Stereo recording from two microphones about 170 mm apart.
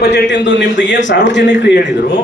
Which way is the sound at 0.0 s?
85° left.